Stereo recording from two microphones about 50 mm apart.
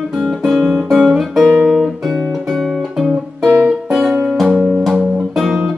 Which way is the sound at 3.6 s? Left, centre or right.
Centre.